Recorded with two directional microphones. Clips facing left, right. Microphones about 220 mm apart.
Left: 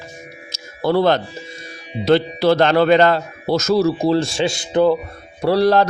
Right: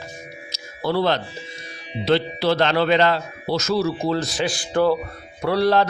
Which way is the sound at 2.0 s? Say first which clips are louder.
Left 5 dB; 45° left (ahead or behind).